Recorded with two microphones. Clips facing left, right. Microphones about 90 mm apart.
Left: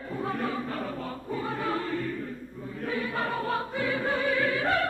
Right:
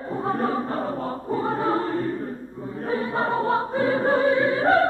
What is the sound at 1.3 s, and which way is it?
Choir, 35° right (ahead or behind).